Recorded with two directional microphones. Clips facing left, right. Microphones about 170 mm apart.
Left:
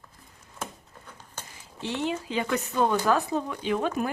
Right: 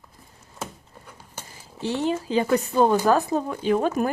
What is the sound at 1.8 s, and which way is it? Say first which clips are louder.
Speech: right 5 dB; 35° right (ahead or behind).